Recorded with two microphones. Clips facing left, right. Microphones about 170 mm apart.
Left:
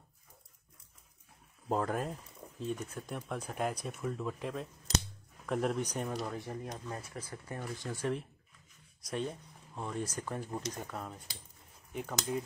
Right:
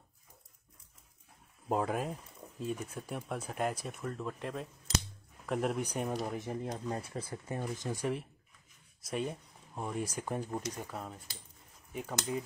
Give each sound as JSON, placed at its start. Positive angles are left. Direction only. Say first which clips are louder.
{"t": 1.7, "sound": "speech", "louder": "right 1 dB", "side_deg": -5}
{"t": 6.0, "sound": "speech", "louder": "right 2 dB", "side_deg": -20}
{"t": 10.6, "sound": "speech", "louder": "even", "side_deg": 0}